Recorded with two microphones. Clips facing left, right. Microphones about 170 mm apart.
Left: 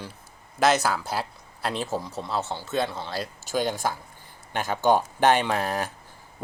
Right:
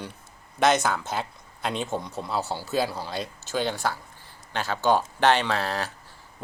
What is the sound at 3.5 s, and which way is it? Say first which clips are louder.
Speech: left 1 dB; 10° left (ahead or behind).